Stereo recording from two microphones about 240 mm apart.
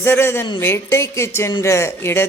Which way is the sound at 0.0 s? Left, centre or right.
Centre.